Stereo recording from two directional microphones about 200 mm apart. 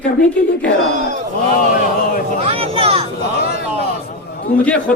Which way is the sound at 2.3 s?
30° right (ahead or behind).